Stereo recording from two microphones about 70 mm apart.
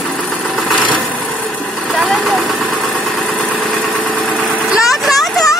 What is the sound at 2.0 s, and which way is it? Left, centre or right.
Vehicle, centre.